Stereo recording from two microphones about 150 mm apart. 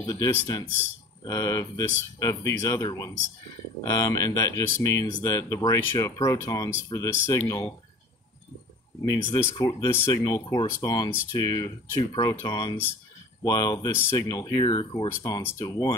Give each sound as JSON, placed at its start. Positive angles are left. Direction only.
{"t": 0.0, "sound": "speech", "side_deg": 25}
{"t": 9.1, "sound": "speech", "side_deg": 25}